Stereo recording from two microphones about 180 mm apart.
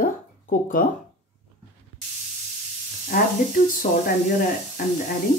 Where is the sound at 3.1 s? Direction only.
50° left (ahead or behind).